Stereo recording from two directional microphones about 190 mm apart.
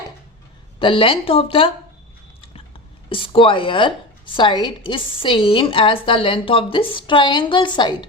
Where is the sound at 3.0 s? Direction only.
25° left (ahead or behind).